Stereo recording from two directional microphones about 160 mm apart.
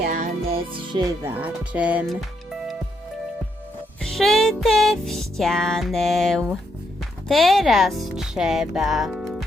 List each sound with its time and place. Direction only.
0.0 s music: 60° right (ahead or behind)
0.4 s music: 35° right (ahead or behind)
1.2 s speech: 10° right (ahead or behind)
2.0 s music: centre (ahead or behind)
4.0 s music: centre (ahead or behind)